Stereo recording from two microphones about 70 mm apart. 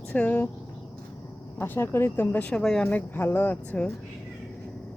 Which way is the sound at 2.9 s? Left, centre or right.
Left.